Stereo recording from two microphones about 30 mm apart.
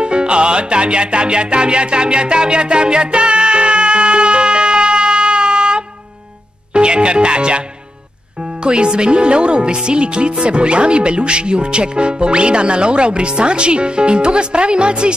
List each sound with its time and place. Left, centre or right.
0.0 s music: right
6.7 s speech: right
8.6 s speech: right